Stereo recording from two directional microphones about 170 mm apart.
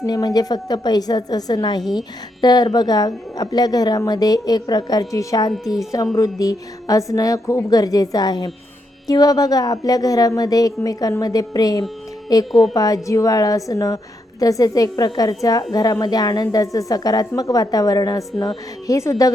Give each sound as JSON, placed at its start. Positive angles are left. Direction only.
{"t": 0.0, "sound": "a woman's voice", "side_deg": 20}